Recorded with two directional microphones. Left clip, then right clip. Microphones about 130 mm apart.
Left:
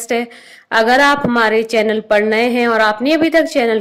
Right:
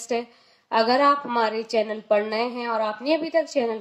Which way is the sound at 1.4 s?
40° left (ahead or behind).